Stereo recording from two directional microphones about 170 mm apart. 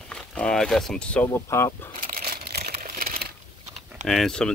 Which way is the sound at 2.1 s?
65° right (ahead or behind).